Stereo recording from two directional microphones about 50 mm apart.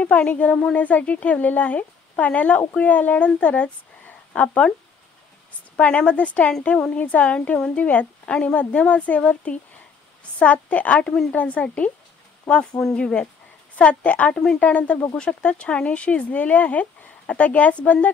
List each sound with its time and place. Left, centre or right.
0.0 s a woman's voice: left
5.8 s a woman's voice: left
14.3 s speech: centre
14.6 s speech: left